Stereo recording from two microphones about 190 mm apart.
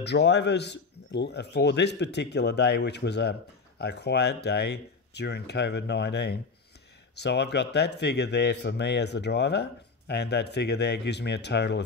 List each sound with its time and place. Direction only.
0.0 s speech: 65° left (ahead or behind)